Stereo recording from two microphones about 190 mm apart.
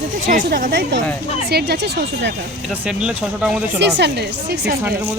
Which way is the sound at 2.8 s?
5° right (ahead or behind).